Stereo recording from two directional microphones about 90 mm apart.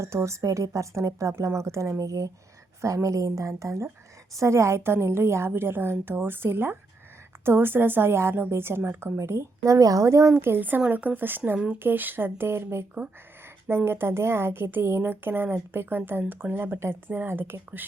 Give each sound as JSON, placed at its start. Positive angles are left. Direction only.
{"t": 0.0, "sound": "a woman's voice", "side_deg": -30}